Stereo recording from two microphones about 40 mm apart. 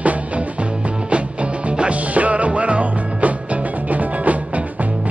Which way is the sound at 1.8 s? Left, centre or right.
Right.